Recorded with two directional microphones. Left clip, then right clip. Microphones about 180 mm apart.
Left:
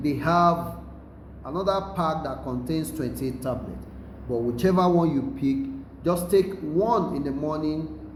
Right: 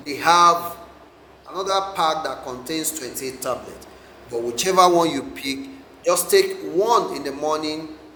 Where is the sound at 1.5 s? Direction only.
10° right (ahead or behind).